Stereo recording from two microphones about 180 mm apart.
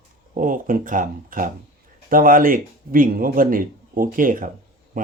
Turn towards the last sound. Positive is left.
turn(degrees=-50)  # may be behind; listen again after turning